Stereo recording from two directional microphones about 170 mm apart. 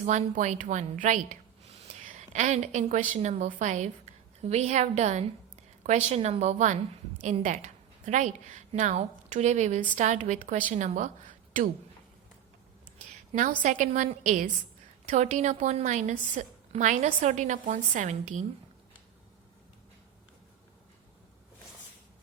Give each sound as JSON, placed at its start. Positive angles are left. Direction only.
{"t": 0.0, "sound": "a woman's voice", "side_deg": -45}
{"t": 13.3, "sound": "a woman's voice", "side_deg": -50}